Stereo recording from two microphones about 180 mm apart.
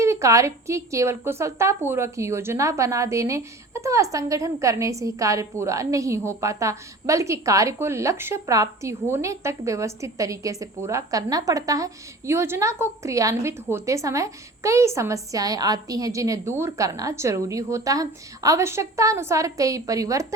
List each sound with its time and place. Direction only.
0.0 s a woman's voice: 15° right (ahead or behind)